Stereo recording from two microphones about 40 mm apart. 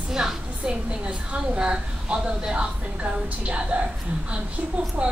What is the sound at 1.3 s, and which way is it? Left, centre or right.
A woman's voice, right.